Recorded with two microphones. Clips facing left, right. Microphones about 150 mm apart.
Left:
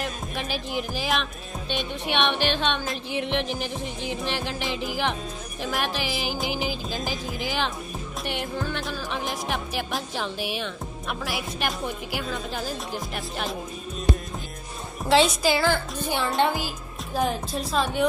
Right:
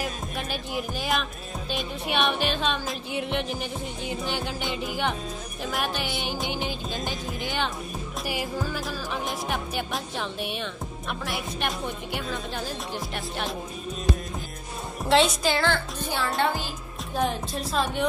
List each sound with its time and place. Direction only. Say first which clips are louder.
0.0 s music: left 1 dB; centre (ahead or behind)
15.0 s a woman's voice: left 1 dB; centre (ahead or behind)
16.6 s music: left 1 dB; 5° left (ahead or behind)